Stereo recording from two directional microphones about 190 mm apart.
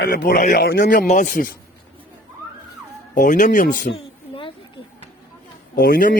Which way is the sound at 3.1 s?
45° left (ahead or behind).